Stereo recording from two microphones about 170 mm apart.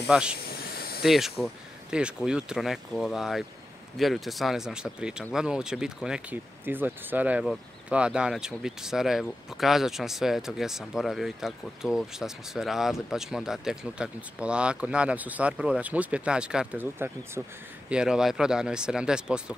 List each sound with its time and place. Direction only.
0.1 s speech: 5° right (ahead or behind)
0.4 s hiss: 65° left (ahead or behind)
1.0 s speech: centre (ahead or behind)